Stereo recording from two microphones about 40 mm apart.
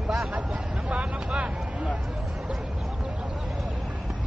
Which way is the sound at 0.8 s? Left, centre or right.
Right.